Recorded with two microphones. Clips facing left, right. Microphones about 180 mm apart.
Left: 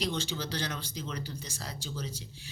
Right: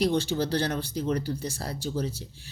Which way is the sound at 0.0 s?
60° right (ahead or behind).